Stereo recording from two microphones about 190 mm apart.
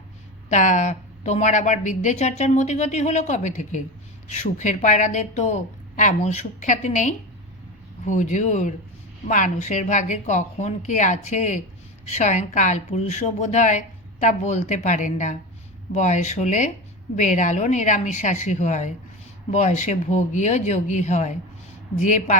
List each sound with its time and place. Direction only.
0.5 s a woman's voice: 40° left (ahead or behind)